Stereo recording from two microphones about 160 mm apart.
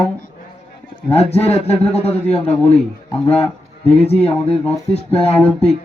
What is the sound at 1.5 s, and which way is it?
Speech, 40° left (ahead or behind).